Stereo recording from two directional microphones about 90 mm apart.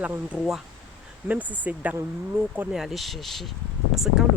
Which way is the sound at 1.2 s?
15° right (ahead or behind).